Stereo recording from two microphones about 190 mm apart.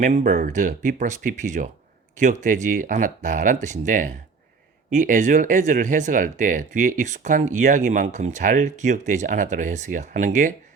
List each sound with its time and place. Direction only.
0.0 s speech: 40° right (ahead or behind)